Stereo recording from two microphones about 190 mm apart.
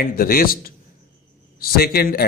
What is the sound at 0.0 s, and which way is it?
A man's voice, 50° left (ahead or behind).